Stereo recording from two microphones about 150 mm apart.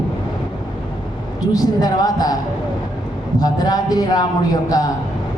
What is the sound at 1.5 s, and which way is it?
Speech, 25° left (ahead or behind).